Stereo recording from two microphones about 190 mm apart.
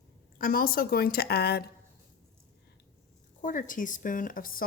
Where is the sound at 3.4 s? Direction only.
45° left (ahead or behind).